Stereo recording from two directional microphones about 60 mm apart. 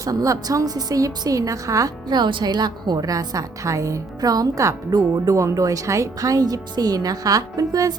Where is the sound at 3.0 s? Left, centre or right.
Right.